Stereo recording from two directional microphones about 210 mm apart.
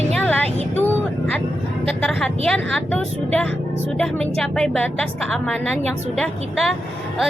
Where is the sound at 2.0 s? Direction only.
5° left (ahead or behind).